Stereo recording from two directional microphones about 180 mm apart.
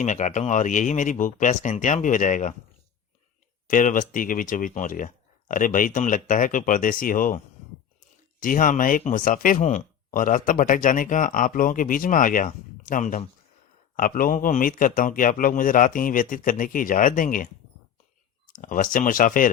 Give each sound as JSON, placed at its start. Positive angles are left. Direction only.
{"t": 0.0, "sound": "speech", "side_deg": 40}
{"t": 3.7, "sound": "speech", "side_deg": 45}
{"t": 18.6, "sound": "speech", "side_deg": 50}